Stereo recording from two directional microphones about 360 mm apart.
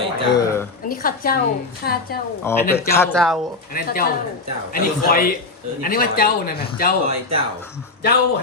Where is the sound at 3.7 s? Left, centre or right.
Left.